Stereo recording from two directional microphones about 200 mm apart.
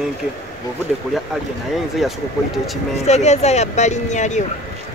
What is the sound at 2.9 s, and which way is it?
Speech, 35° left (ahead or behind).